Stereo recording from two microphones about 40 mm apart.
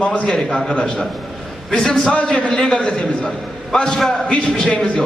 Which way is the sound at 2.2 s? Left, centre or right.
Left.